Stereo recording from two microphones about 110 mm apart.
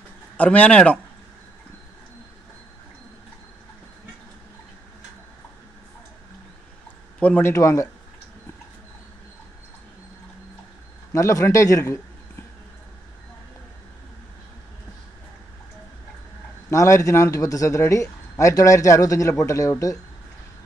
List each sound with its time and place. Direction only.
0.4 s speech: 15° left (ahead or behind)
7.2 s speech: 10° left (ahead or behind)
7.4 s a man's voice: 30° left (ahead or behind)
11.1 s a man's voice: 30° left (ahead or behind)
16.7 s a man's voice: 30° left (ahead or behind)